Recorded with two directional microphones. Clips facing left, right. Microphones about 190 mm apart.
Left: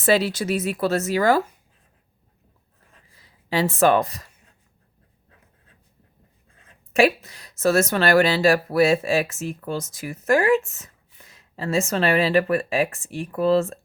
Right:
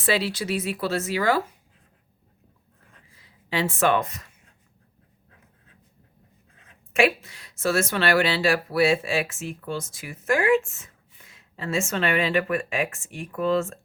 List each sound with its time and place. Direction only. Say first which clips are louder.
0.0 s speech: left 5 dB; 45° left (ahead or behind)
3.2 s speech: left 4 dB; 40° left (ahead or behind)
6.9 s a woman's voice: left 3 dB; 40° left (ahead or behind)